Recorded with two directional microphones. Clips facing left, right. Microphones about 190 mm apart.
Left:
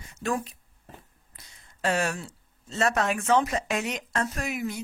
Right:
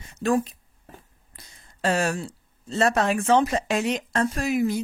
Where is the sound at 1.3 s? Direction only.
35° right (ahead or behind).